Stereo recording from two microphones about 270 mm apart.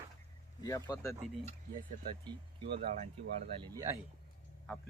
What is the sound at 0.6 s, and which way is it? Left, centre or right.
Speech, centre.